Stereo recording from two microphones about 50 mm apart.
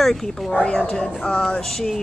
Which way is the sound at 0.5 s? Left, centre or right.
Centre.